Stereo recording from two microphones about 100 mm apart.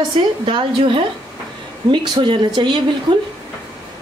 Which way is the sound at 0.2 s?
65° right (ahead or behind).